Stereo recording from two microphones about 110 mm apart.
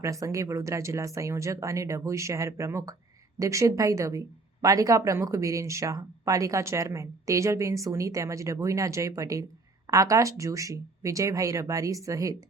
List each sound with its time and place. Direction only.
0.0 s speech: 30° right (ahead or behind)